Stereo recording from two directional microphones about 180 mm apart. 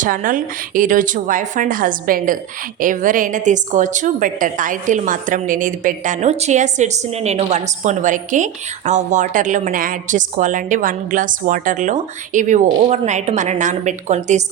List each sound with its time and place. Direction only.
0.0 s a woman's voice: 50° right (ahead or behind)